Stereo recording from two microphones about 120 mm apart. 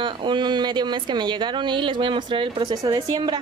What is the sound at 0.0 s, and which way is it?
A woman's voice, 40° right (ahead or behind).